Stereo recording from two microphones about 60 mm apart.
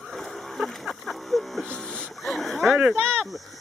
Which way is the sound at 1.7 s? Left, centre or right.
Centre.